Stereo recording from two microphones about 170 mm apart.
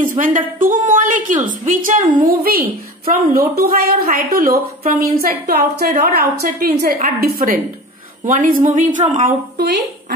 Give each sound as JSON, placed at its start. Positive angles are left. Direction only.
{"t": 0.2, "sound": "a woman's voice", "side_deg": -45}